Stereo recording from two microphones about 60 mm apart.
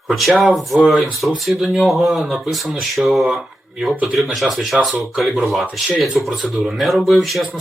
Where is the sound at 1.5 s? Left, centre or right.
Centre.